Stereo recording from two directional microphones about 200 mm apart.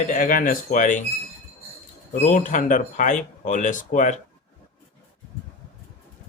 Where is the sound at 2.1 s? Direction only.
40° left (ahead or behind).